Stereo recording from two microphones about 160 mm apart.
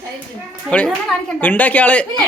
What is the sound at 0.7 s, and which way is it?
Speech, 5° left (ahead or behind).